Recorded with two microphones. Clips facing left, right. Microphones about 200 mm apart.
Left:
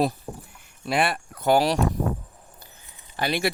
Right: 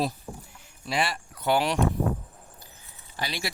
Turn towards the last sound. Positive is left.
turn(degrees=55)  # may be behind; listen again after turning